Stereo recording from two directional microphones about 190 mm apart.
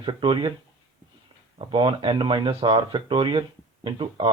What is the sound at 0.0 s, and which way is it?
Speech, 25° right (ahead or behind).